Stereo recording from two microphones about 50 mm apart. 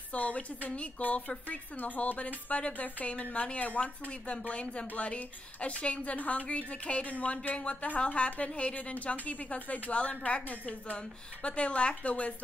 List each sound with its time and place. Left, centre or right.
0.1 s a woman's voice: left
11.4 s a woman's voice: left